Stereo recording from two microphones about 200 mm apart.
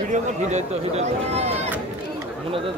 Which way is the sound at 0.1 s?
35° right (ahead or behind).